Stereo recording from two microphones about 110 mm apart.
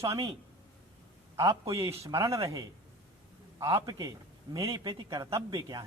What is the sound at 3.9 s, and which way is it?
A man's voice, 35° right (ahead or behind).